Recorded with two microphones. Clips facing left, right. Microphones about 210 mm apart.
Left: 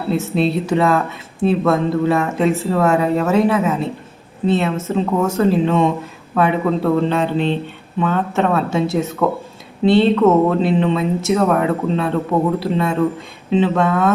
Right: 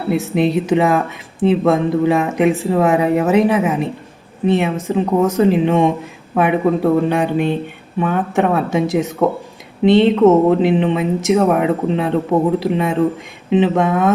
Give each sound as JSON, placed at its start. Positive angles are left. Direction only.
{"t": 0.1, "sound": "speech", "side_deg": -15}